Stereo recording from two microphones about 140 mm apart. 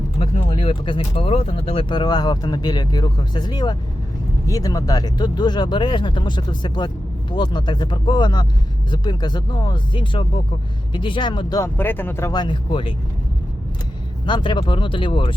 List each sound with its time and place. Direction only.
0.2 s speech: 40° left (ahead or behind)
11.6 s speech: 15° left (ahead or behind)
12.3 s speech: 30° left (ahead or behind)
14.3 s speech: 35° left (ahead or behind)